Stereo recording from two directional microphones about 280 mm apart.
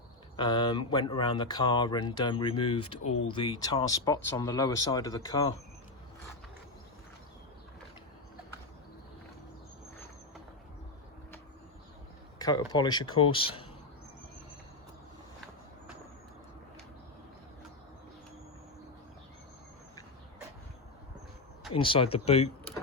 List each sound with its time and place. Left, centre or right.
0.3 s speech: centre
12.4 s speech: centre
21.7 s speech: centre